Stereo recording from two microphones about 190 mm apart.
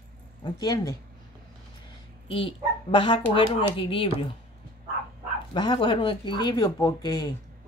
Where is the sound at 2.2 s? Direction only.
30° left (ahead or behind).